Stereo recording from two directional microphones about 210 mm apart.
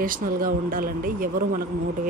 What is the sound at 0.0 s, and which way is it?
A woman's voice, 40° right (ahead or behind).